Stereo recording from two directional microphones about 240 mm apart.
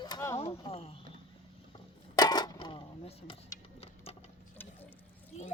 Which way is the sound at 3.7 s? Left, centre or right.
Left.